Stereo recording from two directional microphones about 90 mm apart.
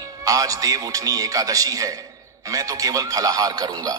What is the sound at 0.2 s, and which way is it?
A man's voice, 40° right (ahead or behind).